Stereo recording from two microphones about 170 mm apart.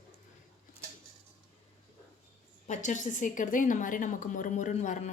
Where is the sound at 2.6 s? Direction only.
45° left (ahead or behind).